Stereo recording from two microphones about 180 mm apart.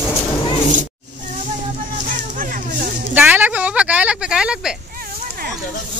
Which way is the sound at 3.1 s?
10° right (ahead or behind).